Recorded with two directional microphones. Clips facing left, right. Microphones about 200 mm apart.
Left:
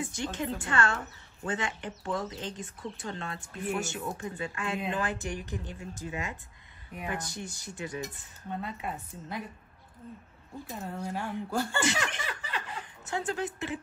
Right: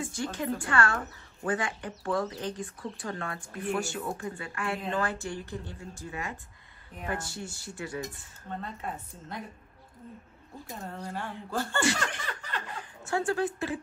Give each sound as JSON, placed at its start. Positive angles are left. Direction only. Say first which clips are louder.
{"t": 0.0, "sound": "speech", "louder": "right 1 dB", "side_deg": 20}
{"t": 8.5, "sound": "speech", "louder": "left 1 dB", "side_deg": 10}
{"t": 10.7, "sound": "speech", "louder": "left 2 dB", "side_deg": 5}
{"t": 12.3, "sound": "laughter", "louder": "even", "side_deg": 5}
{"t": 13.0, "sound": "speech", "louder": "right 4 dB", "side_deg": 20}